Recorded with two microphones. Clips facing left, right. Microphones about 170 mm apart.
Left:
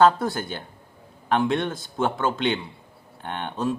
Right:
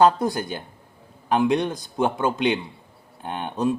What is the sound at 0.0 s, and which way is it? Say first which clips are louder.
Speech: right 1 dB; 15° right (ahead or behind).